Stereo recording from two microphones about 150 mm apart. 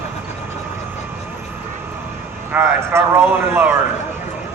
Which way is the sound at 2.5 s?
15° right (ahead or behind).